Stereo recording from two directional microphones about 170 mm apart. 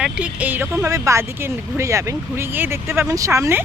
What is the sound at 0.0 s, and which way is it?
Speech, 5° right (ahead or behind).